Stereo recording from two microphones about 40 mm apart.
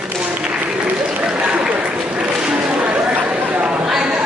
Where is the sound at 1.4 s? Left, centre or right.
Right.